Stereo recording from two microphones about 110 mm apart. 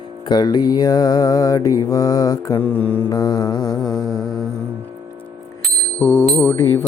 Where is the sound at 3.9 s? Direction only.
Centre (ahead or behind).